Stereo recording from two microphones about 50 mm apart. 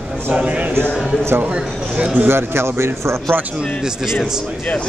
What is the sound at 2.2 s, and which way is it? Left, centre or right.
Speech, right.